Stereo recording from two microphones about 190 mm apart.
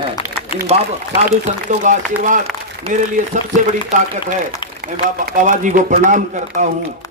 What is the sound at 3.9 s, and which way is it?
Speech, 40° right (ahead or behind).